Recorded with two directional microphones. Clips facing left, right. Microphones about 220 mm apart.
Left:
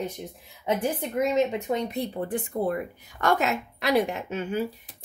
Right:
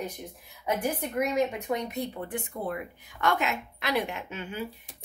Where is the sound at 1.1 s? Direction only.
25° left (ahead or behind).